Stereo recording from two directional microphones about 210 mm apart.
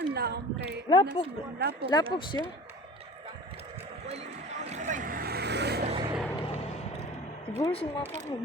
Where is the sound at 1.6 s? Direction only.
50° right (ahead or behind).